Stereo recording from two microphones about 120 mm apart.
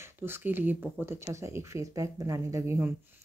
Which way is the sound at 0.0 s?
20° right (ahead or behind).